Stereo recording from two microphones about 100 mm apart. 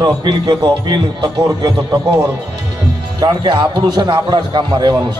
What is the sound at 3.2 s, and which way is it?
A man's voice, 45° right (ahead or behind).